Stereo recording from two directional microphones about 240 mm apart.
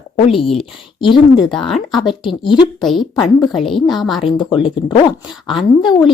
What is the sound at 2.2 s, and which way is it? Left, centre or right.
Speech, centre.